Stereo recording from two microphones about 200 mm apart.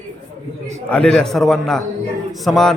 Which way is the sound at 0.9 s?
5° left (ahead or behind).